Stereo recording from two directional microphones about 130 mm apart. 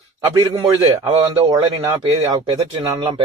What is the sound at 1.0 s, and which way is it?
Speech, 30° right (ahead or behind).